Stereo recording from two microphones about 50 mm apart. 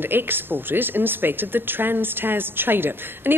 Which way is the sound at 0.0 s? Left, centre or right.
Right.